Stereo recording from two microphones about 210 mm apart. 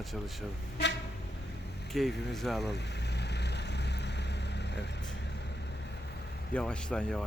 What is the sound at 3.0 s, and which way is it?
Vehicle, 55° left (ahead or behind).